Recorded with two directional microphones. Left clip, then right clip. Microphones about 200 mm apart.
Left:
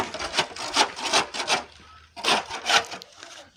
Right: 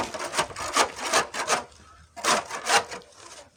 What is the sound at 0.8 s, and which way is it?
Wood, 35° right (ahead or behind).